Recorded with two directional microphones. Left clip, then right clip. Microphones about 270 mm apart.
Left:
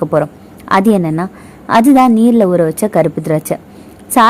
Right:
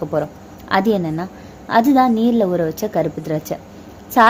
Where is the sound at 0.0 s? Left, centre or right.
Left.